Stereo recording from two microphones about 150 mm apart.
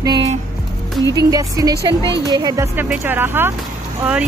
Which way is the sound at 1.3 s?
25° right (ahead or behind).